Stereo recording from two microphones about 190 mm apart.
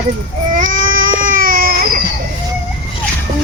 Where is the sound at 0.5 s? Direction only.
45° right (ahead or behind).